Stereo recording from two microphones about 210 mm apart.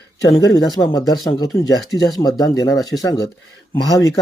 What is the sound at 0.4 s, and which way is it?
Speech, 15° left (ahead or behind).